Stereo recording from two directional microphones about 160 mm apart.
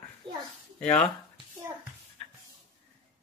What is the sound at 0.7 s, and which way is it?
Speech, 5° left (ahead or behind).